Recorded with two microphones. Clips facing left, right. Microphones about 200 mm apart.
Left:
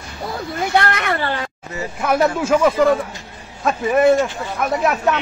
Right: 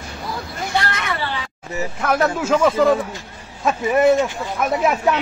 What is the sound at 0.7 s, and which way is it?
Speech, 55° left (ahead or behind).